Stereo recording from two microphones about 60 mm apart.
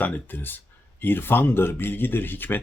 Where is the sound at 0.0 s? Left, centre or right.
Left.